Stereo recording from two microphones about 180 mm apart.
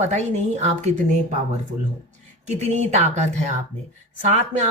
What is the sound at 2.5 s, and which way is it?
A woman's voice, 40° right (ahead or behind).